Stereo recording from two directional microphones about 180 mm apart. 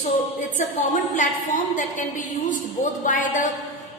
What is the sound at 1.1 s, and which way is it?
A woman's voice, 45° left (ahead or behind).